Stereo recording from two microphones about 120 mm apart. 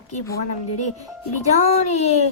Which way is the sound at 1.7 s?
65° left (ahead or behind).